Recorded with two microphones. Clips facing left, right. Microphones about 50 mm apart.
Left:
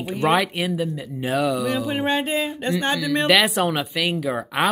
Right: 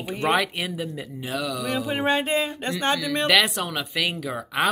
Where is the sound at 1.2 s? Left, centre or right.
Left.